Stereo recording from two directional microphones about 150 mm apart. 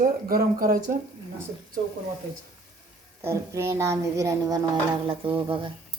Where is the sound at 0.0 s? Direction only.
75° right (ahead or behind).